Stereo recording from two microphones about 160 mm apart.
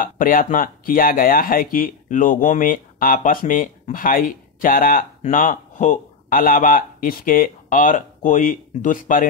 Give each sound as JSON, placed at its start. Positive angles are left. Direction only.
{"t": 0.0, "sound": "speech", "side_deg": 60}